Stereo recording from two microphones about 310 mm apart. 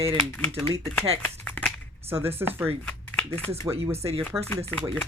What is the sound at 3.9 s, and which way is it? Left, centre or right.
Speech, centre.